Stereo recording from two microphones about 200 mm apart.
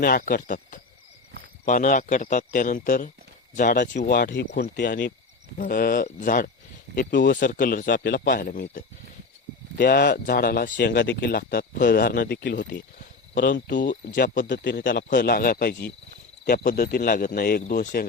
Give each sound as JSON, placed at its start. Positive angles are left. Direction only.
{"t": 0.0, "sound": "speech", "side_deg": 45}
{"t": 8.0, "sound": "speech", "side_deg": 55}
{"t": 9.7, "sound": "speech", "side_deg": 50}
{"t": 13.7, "sound": "speech", "side_deg": 40}
{"t": 14.5, "sound": "a man's voice", "side_deg": 60}